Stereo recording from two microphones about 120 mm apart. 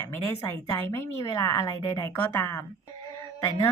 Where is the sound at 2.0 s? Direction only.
20° left (ahead or behind).